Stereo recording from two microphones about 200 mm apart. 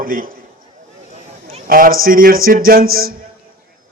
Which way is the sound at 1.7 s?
45° right (ahead or behind).